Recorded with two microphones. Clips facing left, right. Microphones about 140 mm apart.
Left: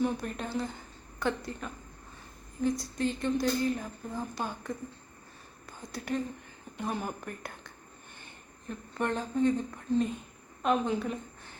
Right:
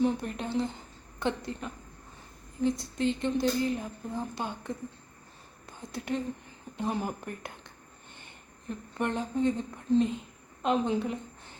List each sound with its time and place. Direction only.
0.0 s a woman's voice: 20° right (ahead or behind)
5.6 s a sound: 25° right (ahead or behind)
6.7 s a woman's voice: 20° right (ahead or behind)
9.0 s a woman's voice: 20° right (ahead or behind)